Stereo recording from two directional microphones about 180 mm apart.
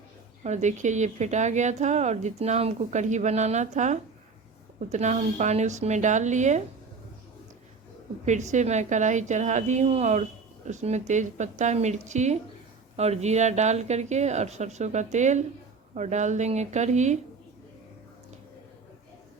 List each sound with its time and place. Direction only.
0.4 s a woman's voice: 40° right (ahead or behind)
8.2 s a woman's voice: 40° right (ahead or behind)